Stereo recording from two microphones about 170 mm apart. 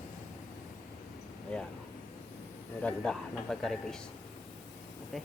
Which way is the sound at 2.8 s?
5° left (ahead or behind).